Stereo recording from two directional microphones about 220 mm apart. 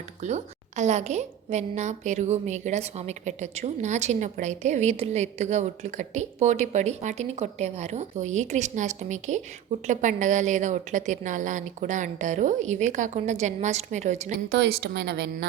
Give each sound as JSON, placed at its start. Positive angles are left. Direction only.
{"t": 0.2, "sound": "a woman's voice", "side_deg": -30}
{"t": 14.5, "sound": "a woman's voice", "side_deg": -50}